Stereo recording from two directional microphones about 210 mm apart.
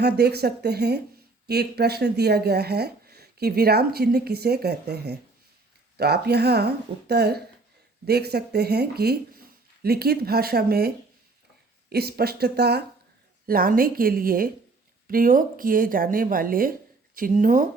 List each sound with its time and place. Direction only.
0.0 s speech: 50° right (ahead or behind)